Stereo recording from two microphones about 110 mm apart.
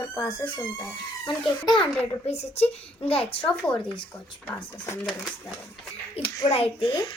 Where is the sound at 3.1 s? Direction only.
55° left (ahead or behind).